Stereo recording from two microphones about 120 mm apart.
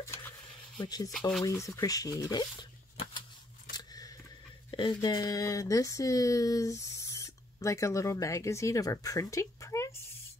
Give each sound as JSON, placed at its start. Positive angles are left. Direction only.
{"t": 0.0, "sound": "a sound", "side_deg": 20}
{"t": 0.7, "sound": "speech", "side_deg": 35}
{"t": 3.7, "sound": "scissors", "side_deg": 30}
{"t": 4.6, "sound": "speech", "side_deg": 40}